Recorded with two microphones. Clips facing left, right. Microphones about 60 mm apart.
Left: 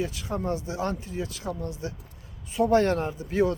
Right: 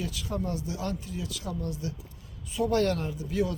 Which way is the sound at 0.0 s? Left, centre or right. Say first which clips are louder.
Left 3 dB; left.